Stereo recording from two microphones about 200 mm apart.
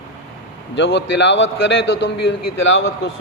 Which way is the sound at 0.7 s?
60° left (ahead or behind).